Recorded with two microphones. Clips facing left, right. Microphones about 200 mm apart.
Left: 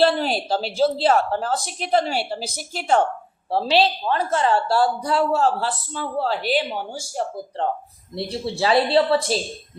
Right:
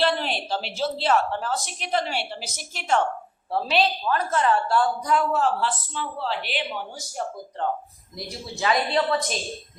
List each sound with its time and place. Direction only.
0.0 s a woman's voice: 40° left (ahead or behind)